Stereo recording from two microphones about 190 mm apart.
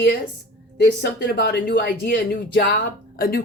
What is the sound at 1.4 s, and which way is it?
Speech, 60° left (ahead or behind).